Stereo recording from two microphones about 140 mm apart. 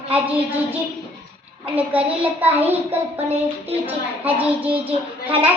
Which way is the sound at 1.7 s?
10° right (ahead or behind).